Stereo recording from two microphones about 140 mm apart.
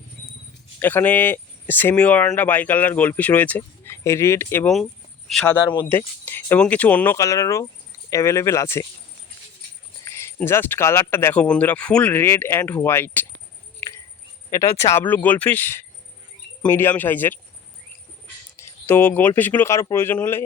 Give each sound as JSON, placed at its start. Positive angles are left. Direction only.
{"t": 0.8, "sound": "speech", "side_deg": 15}
{"t": 5.3, "sound": "speech", "side_deg": 5}
{"t": 5.6, "sound": "speech", "side_deg": 30}
{"t": 5.9, "sound": "speech", "side_deg": 15}
{"t": 10.0, "sound": "speech", "side_deg": 20}
{"t": 13.7, "sound": "a sound", "side_deg": 20}
{"t": 14.5, "sound": "speech", "side_deg": 20}
{"t": 18.5, "sound": "speech", "side_deg": 15}